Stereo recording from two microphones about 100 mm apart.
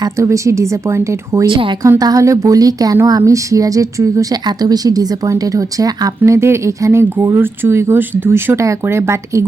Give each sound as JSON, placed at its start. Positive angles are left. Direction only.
{"t": 0.2, "sound": "speech", "side_deg": -30}
{"t": 1.5, "sound": "speech", "side_deg": -60}
{"t": 1.8, "sound": "speech", "side_deg": -35}